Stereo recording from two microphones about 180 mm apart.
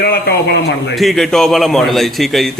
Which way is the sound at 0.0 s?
60° left (ahead or behind).